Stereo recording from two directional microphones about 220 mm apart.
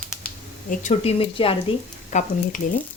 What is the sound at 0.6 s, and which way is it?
Speech, 30° left (ahead or behind).